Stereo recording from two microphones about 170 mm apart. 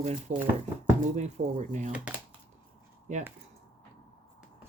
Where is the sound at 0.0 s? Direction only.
40° right (ahead or behind).